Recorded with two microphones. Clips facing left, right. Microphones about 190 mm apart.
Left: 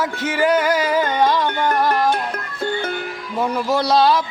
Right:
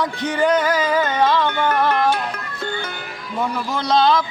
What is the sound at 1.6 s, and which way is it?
Music, 40° left (ahead or behind).